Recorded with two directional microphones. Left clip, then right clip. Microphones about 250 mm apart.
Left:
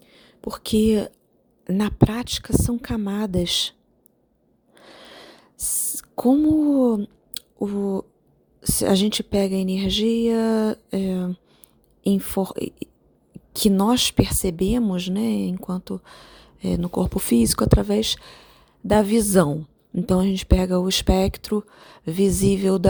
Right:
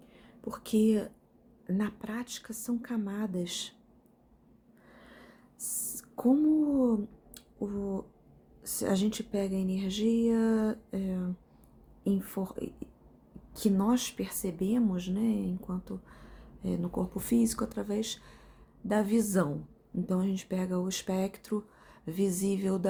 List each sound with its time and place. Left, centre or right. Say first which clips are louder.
0.0 s whispering: left 9 dB; left
1.6 s speech: left 14 dB; left
4.7 s a sound: left 12 dB; left
8.6 s speech: left 11 dB; left